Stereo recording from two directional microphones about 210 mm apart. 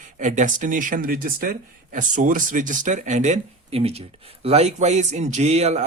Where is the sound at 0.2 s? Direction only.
35° right (ahead or behind).